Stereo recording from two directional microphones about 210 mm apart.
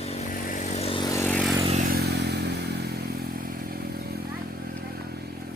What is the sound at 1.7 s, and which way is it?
Motorcycle, 40° right (ahead or behind).